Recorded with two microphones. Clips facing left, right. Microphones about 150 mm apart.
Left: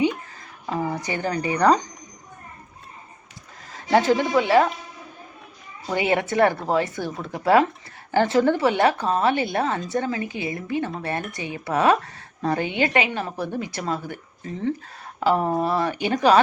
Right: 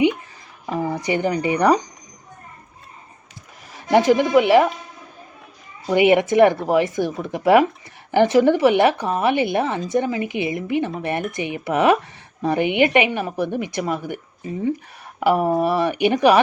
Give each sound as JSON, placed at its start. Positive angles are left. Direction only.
{"t": 1.0, "sound": "a woman's voice", "side_deg": -20}
{"t": 3.9, "sound": "a woman's voice", "side_deg": -15}
{"t": 5.9, "sound": "a woman's voice", "side_deg": -20}